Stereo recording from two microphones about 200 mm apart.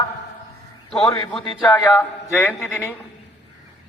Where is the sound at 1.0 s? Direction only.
25° left (ahead or behind).